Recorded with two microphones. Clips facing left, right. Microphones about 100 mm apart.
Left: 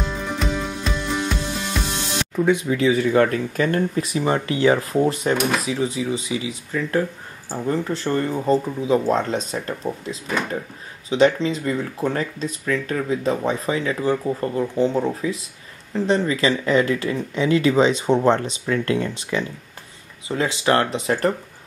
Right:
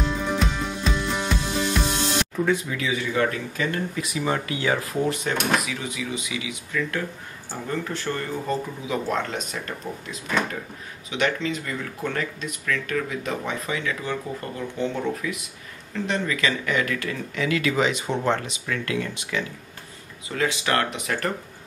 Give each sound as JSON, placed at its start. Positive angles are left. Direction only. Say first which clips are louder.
{"t": 0.0, "sound": "music", "louder": "right 1 dB", "side_deg": 0}
{"t": 2.7, "sound": "speech", "louder": "left 9 dB", "side_deg": 35}
{"t": 11.1, "sound": "speech", "louder": "left 8 dB", "side_deg": 30}